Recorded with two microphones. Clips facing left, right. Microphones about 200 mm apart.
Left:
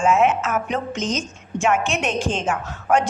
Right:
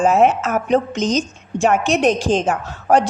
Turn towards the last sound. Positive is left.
turn(degrees=-35)  # may be behind; listen again after turning